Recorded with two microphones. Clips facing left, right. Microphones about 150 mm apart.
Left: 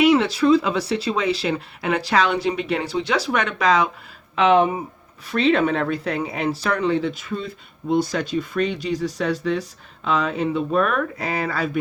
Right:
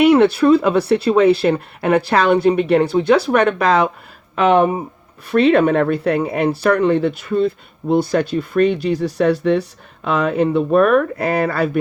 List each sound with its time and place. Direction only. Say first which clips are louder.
0.0 s speech: right 5 dB; 60° right (ahead or behind)